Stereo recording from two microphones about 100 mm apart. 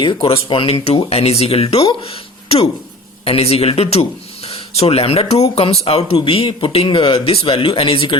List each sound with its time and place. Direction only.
0.0 s speech: 55° left (ahead or behind); by 1.9 s 80° left
1.9 s speech: 70° left (ahead or behind); by 6.1 s 85° left
6.2 s speech: 65° left (ahead or behind)